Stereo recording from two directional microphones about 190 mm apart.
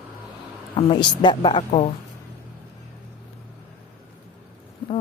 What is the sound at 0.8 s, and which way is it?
Speech, 25° left (ahead or behind).